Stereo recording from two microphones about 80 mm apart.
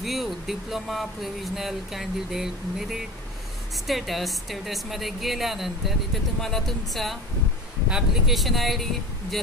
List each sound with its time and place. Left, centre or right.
0.0 s a woman's voice: centre